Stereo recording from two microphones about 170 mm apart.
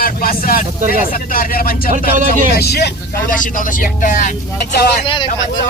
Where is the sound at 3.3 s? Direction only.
50° left (ahead or behind).